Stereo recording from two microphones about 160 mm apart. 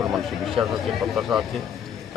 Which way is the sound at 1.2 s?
Centre (ahead or behind).